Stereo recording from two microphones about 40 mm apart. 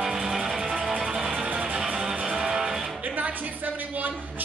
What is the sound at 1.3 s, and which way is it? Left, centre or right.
Music, right.